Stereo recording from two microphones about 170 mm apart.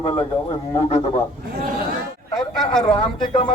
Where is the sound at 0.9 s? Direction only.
35° left (ahead or behind).